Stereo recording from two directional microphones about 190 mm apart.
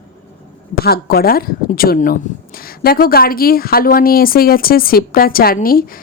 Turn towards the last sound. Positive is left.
turn(degrees=50)  # may be behind; listen again after turning